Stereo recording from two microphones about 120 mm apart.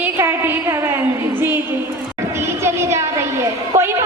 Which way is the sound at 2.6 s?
25° right (ahead or behind).